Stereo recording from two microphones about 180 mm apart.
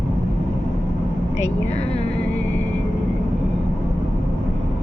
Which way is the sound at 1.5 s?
40° left (ahead or behind).